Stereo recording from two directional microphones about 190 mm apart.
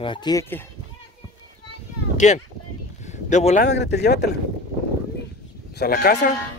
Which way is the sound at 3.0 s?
40° left (ahead or behind).